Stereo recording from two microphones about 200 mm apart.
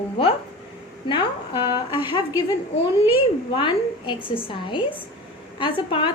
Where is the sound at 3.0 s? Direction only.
25° left (ahead or behind).